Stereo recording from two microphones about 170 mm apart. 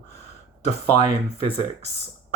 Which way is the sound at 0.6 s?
35° left (ahead or behind).